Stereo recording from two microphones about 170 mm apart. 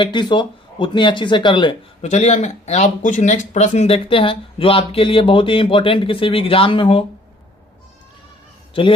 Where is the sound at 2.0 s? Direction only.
40° left (ahead or behind).